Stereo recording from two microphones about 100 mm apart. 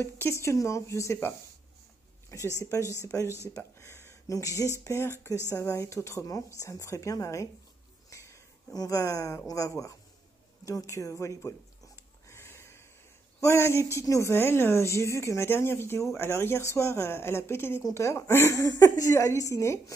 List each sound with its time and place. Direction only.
0.0 s speech: 25° left (ahead or behind)
2.6 s speech: 30° left (ahead or behind)
8.1 s a sound: 30° left (ahead or behind)
9.7 s speech: 35° left (ahead or behind)
10.6 s a sound: 35° left (ahead or behind)
13.4 s speech: 25° left (ahead or behind)